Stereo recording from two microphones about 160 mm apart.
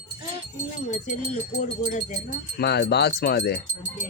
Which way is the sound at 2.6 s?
90° left.